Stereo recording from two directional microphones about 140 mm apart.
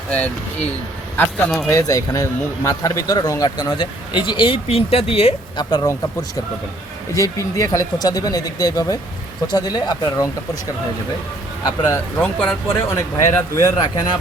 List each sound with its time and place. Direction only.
0.1 s speech: 10° left (ahead or behind)
1.7 s a man's voice: 25° left (ahead or behind); by 5.6 s 45° left (ahead or behind)
5.7 s speech: 25° left (ahead or behind)
11.6 s speech: 30° left (ahead or behind)
12.1 s speech: 10° left (ahead or behind); by 14.2 s 30° left (ahead or behind)